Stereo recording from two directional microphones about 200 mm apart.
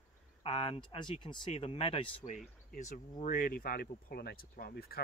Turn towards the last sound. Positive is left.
turn(degrees=50)  # may be behind; listen again after turning